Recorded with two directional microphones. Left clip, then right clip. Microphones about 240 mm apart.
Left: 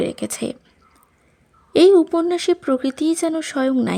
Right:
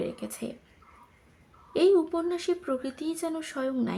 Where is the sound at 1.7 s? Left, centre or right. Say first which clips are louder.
Left 10 dB; left.